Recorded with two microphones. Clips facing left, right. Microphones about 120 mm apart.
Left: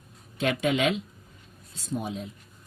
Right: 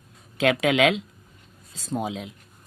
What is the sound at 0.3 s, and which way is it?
Speech, 90° right.